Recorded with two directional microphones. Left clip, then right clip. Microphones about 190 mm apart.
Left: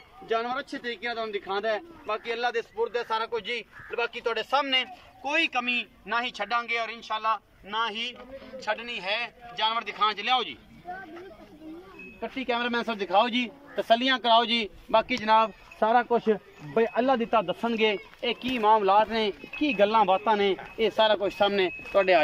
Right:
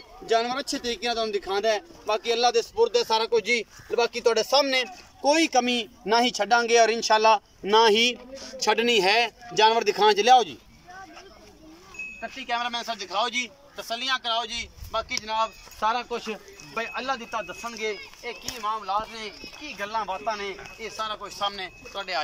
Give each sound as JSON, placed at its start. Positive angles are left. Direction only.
{"t": 0.3, "sound": "a man's voice", "side_deg": -10}
{"t": 12.4, "sound": "speech", "side_deg": 25}